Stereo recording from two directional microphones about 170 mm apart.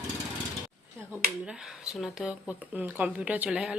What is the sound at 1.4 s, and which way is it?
Speech, 5° right (ahead or behind).